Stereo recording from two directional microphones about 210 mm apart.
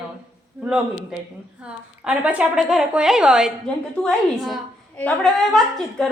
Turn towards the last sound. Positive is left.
turn(degrees=0)  # may be behind; listen again after turning